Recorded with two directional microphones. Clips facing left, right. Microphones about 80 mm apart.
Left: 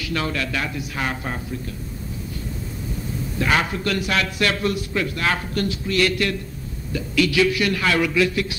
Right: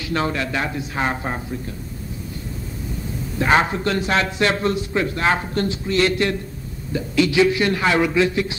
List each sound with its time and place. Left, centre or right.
0.0 s a man's voice: right
3.3 s a man's voice: right